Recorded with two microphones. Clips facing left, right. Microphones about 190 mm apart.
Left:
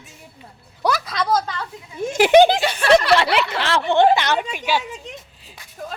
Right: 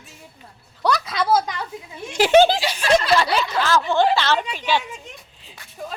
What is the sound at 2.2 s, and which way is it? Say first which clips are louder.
Speech: left 2 dB; 15° left (ahead or behind).